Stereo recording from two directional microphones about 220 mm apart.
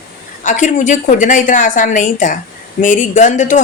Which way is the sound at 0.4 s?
35° left (ahead or behind).